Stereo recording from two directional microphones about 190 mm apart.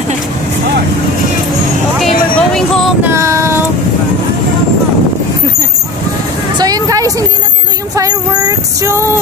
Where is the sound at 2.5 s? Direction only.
5° left (ahead or behind).